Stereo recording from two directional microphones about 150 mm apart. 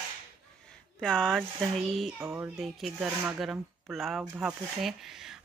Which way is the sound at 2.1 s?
15° right (ahead or behind).